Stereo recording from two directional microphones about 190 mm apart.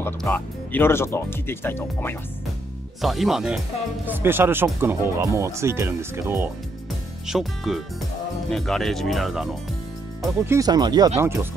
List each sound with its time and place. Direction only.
0.0 s speech: 10° left (ahead or behind)
3.0 s speech: centre (ahead or behind)
7.2 s speech: centre (ahead or behind)
10.4 s speech: 15° right (ahead or behind)